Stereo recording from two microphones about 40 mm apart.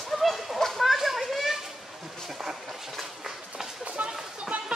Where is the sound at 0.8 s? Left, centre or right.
Centre.